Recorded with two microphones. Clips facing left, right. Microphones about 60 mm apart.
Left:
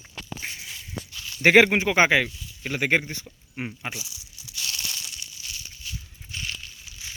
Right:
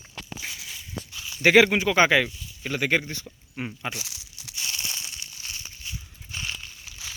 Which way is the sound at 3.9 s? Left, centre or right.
Right.